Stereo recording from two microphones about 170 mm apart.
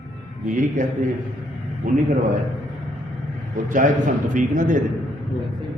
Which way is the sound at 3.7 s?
50° right (ahead or behind).